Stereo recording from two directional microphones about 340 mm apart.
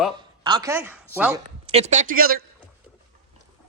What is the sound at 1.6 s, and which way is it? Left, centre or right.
Speech, centre.